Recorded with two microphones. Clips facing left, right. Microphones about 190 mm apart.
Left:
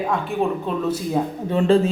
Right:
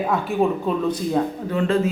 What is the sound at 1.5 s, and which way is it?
Speech, 30° left (ahead or behind).